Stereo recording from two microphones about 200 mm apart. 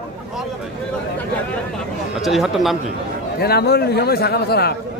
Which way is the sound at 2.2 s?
Centre (ahead or behind).